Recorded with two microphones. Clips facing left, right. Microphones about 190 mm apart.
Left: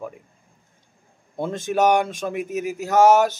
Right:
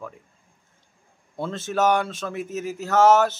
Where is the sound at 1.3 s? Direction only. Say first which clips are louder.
Left 3 dB; 15° left (ahead or behind).